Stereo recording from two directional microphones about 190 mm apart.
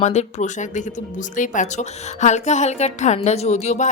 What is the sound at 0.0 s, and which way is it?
Speech, 35° left (ahead or behind).